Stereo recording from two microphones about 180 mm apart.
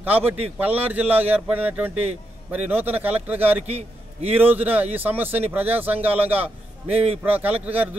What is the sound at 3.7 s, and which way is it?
Speech, 35° right (ahead or behind).